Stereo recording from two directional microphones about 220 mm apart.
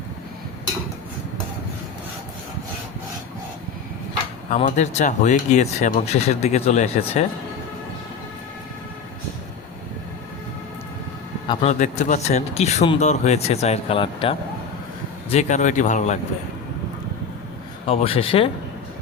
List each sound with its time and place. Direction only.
4.5 s speech: 30° left (ahead or behind)
11.4 s a man's voice: 30° left (ahead or behind)
17.8 s a man's voice: 25° left (ahead or behind)